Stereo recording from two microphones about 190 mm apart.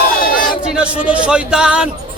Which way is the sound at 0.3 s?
50° left (ahead or behind).